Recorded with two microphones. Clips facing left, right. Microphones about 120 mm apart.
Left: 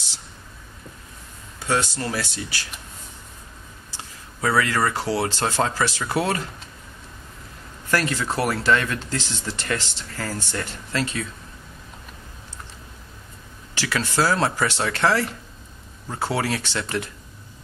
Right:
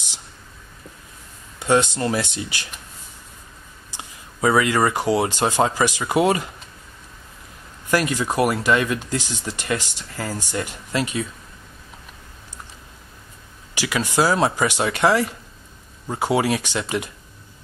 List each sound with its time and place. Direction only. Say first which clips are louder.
1.6 s speech: right 5 dB; 20° right (ahead or behind)
3.9 s speech: right 2 dB; 15° right (ahead or behind)
7.9 s speech: right 3 dB; 15° right (ahead or behind)
13.7 s speech: right 2 dB; 15° right (ahead or behind)